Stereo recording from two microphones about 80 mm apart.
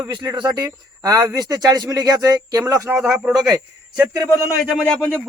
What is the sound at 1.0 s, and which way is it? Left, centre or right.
Speech, right.